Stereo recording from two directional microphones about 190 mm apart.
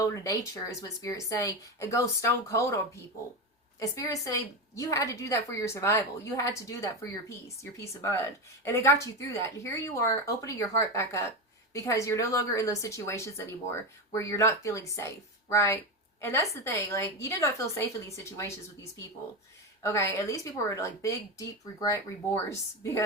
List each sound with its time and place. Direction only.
0.0 s a woman's voice: 15° left (ahead or behind)